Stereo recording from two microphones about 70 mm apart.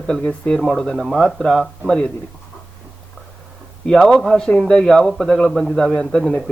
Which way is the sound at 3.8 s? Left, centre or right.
Centre.